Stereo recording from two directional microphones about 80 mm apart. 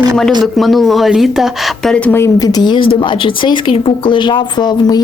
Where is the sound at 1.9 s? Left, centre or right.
Centre.